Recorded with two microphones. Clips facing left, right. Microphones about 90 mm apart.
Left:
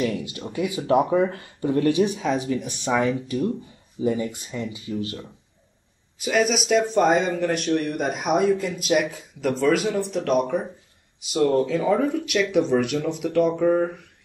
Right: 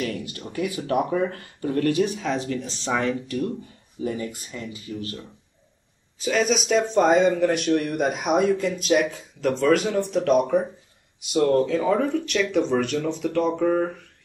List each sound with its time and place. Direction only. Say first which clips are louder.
0.0 s speech: left 3 dB; 20° left (ahead or behind)
6.2 s speech: even; 5° left (ahead or behind)